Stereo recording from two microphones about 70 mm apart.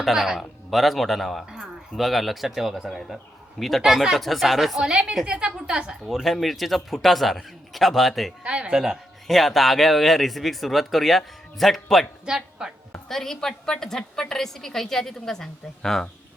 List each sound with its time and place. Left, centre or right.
0.0 s a woman's voice: centre
8.4 s speech: centre
8.8 s a woman's voice: centre
12.2 s speech: centre
13.1 s a woman's voice: centre